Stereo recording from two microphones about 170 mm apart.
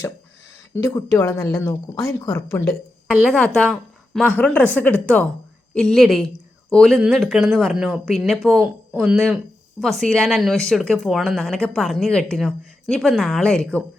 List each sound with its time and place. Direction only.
0.7 s speech: 15° left (ahead or behind)
3.3 s speech: 5° left (ahead or behind)